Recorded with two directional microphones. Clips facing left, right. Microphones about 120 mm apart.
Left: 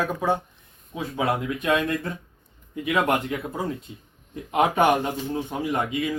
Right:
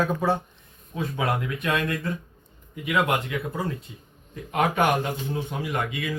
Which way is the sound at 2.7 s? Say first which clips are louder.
Left 1 dB; 30° left (ahead or behind).